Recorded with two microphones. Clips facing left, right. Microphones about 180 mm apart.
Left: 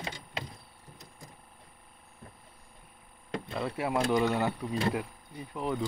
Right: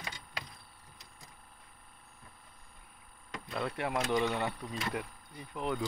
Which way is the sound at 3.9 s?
35° left (ahead or behind).